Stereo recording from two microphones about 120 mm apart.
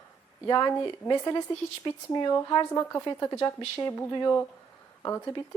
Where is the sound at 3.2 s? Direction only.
25° left (ahead or behind).